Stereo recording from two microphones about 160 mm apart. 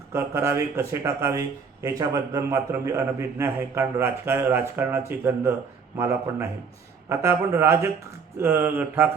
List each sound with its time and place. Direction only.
0.1 s speech: 15° right (ahead or behind)